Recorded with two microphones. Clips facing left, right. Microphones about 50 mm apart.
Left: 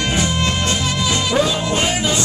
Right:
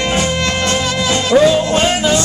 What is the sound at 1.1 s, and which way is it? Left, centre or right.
Music, right.